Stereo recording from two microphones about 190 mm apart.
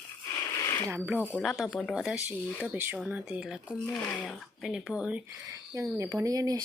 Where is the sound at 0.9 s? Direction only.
10° right (ahead or behind).